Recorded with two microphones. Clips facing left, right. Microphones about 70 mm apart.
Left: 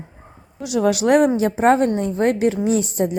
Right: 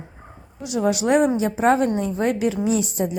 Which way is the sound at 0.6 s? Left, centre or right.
Left.